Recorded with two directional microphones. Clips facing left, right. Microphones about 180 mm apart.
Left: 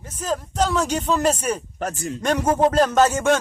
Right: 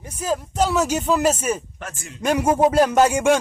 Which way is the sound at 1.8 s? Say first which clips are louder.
Left 9 dB; 40° left (ahead or behind).